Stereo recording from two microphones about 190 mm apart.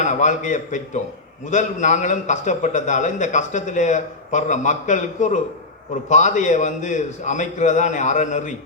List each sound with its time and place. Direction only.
0.0 s a man's voice: 40° left (ahead or behind)